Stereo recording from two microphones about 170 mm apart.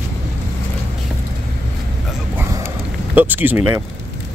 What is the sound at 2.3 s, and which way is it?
Vehicle, 10° right (ahead or behind).